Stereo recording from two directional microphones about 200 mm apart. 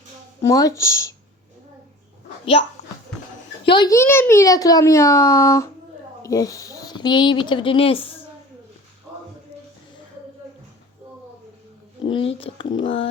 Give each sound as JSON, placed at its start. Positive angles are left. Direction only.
{"t": 0.4, "sound": "a child's voice", "side_deg": 15}
{"t": 2.4, "sound": "a child's voice", "side_deg": 25}
{"t": 3.7, "sound": "a child's voice", "side_deg": 20}
{"t": 12.1, "sound": "speech", "side_deg": 30}